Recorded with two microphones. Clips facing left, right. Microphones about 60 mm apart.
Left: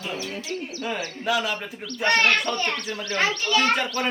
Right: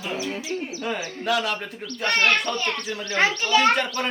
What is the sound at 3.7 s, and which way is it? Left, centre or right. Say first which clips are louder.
Speech: right 1 dB; centre.